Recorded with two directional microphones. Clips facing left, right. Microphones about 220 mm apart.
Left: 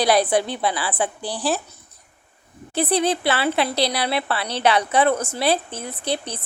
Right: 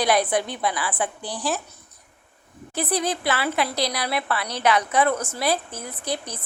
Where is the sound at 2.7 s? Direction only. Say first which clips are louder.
Left 5 dB; 30° left (ahead or behind).